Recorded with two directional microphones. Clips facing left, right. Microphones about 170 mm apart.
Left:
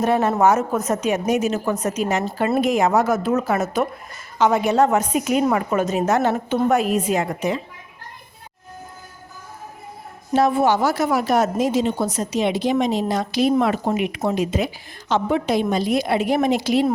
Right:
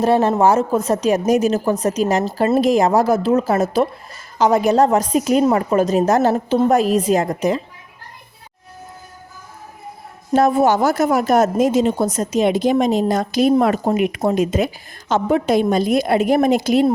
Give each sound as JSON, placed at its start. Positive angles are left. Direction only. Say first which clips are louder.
{"t": 0.0, "sound": "a woman's voice", "louder": "right 3 dB", "side_deg": -30}
{"t": 10.3, "sound": "a woman's voice", "louder": "right 3 dB", "side_deg": -45}